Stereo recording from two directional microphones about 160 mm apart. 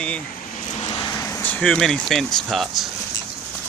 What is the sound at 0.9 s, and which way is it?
Vehicle, 25° left (ahead or behind).